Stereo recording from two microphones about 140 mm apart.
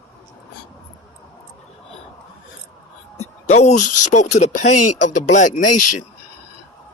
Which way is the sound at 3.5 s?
55° left (ahead or behind).